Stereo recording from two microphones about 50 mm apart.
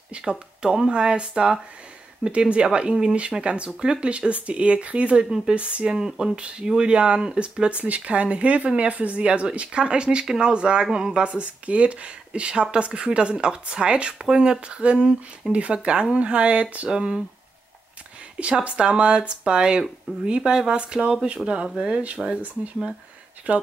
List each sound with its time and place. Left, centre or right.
0.2 s speech: centre
5.9 s speech: centre
16.9 s speech: centre
18.4 s speech: right